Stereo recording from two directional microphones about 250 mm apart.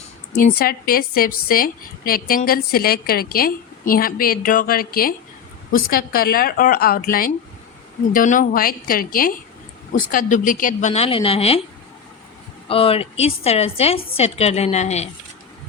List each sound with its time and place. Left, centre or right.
0.3 s a woman's voice: left
12.6 s a woman's voice: left